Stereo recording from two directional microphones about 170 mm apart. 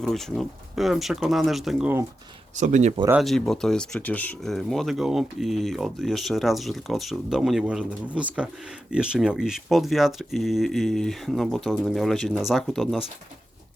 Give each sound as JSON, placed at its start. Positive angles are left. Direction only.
{"t": 0.0, "sound": "speech", "side_deg": 5}
{"t": 2.6, "sound": "speech", "side_deg": -45}
{"t": 3.1, "sound": "speech", "side_deg": 0}